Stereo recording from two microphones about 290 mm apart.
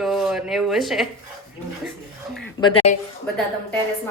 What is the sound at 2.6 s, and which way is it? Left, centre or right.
Speech, left.